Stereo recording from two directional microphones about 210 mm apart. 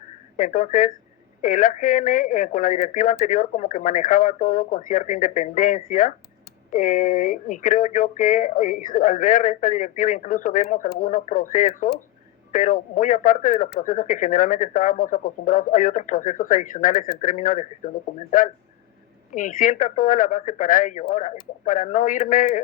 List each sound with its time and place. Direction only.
0.3 s speech: 40° left (ahead or behind)